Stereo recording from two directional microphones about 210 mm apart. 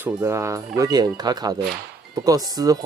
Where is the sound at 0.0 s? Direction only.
10° right (ahead or behind).